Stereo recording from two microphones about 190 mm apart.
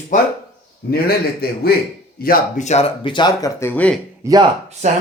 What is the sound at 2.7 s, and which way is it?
Speech, 30° left (ahead or behind).